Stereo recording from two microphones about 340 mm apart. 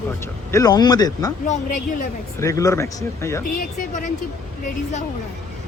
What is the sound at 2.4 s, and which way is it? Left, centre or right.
Speech, centre.